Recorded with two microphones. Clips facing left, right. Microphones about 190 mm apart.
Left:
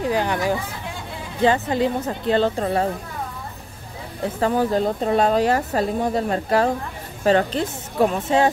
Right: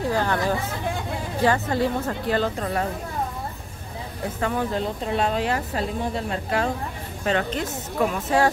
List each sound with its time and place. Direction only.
0.0 s a woman's voice: 15° left (ahead or behind)
4.4 s speech: 35° left (ahead or behind)